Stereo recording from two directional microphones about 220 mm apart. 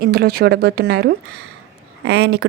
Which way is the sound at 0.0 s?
45° right (ahead or behind).